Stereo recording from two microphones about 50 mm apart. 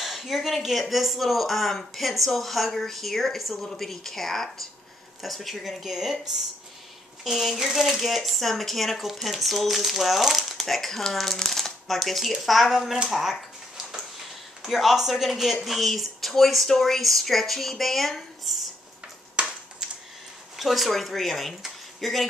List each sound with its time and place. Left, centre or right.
0.0 s speech: centre
7.2 s speech: centre
13.1 s a sound: centre
14.6 s speech: centre
19.4 s a sound: right
20.5 s speech: centre